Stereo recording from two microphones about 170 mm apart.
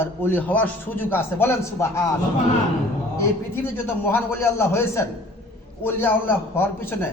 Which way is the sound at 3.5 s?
15° left (ahead or behind).